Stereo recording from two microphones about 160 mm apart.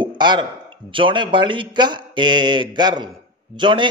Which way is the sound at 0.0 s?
30° right (ahead or behind).